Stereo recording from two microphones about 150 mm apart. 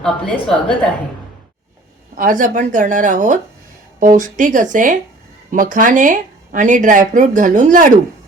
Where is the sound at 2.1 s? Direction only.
60° right (ahead or behind).